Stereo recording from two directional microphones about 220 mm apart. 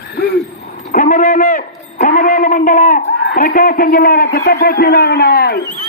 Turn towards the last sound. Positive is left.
turn(degrees=45)  # may be behind; listen again after turning